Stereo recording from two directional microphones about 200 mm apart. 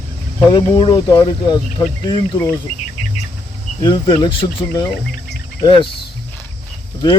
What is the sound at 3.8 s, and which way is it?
Speech, 20° left (ahead or behind).